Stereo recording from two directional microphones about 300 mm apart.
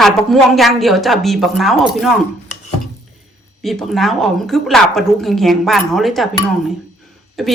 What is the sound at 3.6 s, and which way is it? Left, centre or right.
Speech, centre.